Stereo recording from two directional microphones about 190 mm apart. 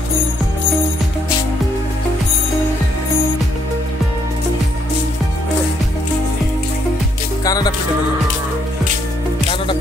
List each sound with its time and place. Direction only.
7.4 s music: 20° left (ahead or behind)